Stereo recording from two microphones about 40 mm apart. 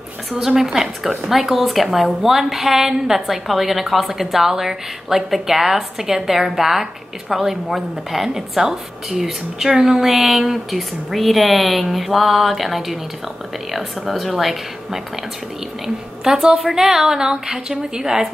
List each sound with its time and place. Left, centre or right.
0.4 s a woman's voice: centre
16.3 s a woman's voice: centre